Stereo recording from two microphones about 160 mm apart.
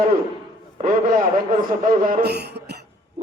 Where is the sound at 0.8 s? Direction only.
60° right (ahead or behind); by 2.8 s 90° right.